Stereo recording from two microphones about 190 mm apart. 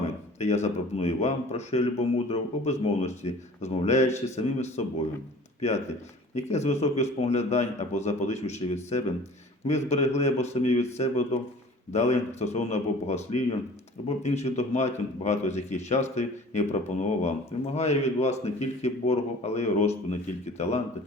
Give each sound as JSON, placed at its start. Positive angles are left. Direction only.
{"t": 0.3, "sound": "a man's voice", "side_deg": 35}